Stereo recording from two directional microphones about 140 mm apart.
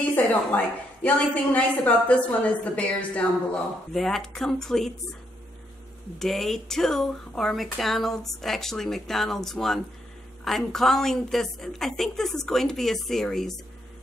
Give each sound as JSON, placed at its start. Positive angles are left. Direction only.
{"t": 0.1, "sound": "a woman's voice", "side_deg": 10}
{"t": 6.1, "sound": "speech", "side_deg": 0}